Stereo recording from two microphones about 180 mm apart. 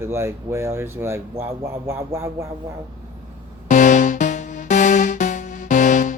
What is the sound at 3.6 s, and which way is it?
Music, 45° left (ahead or behind).